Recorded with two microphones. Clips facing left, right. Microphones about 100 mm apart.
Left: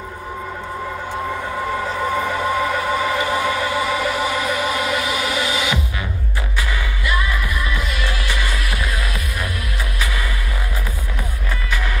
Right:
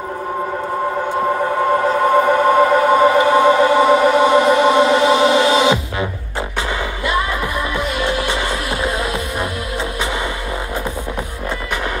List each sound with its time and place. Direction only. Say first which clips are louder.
2.1 s music: right 9 dB; 50° right (ahead or behind)
3.4 s a sound: right 9 dB; 35° right (ahead or behind)
3.9 s music: right 9 dB; 25° right (ahead or behind)
7.7 s music: right 6 dB; 25° right (ahead or behind)